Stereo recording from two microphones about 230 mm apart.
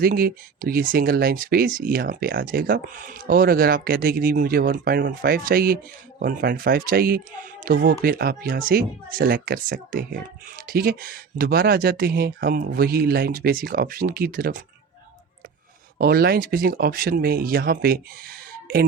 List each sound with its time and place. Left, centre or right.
0.0 s speech: right
16.0 s speech: right